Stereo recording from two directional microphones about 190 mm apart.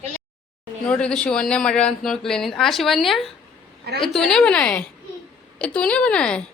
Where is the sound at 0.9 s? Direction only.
5° left (ahead or behind).